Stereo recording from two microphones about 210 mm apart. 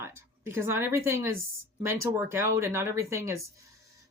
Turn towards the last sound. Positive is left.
turn(degrees=-15)  # may be behind; listen again after turning